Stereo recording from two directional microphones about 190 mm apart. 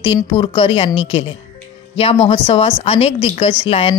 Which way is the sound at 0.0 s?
25° left (ahead or behind).